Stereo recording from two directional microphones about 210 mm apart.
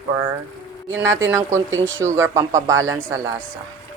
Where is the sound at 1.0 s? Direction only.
60° right (ahead or behind).